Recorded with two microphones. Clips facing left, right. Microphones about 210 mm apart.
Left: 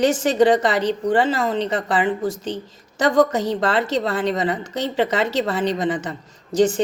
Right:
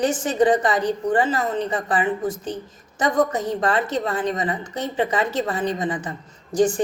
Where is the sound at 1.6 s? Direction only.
90° left.